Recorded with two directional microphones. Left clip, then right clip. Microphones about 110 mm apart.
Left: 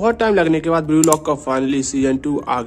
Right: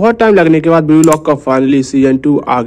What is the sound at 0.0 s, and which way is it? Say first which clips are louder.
A man's voice: right 7 dB; 40° right (ahead or behind).